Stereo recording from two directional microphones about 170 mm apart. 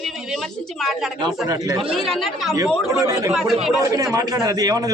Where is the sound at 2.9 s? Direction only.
20° right (ahead or behind).